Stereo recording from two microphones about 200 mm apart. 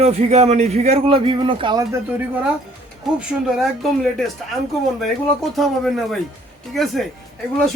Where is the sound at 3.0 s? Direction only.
Centre (ahead or behind).